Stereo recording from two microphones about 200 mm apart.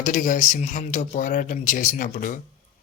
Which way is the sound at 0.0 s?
40° left (ahead or behind).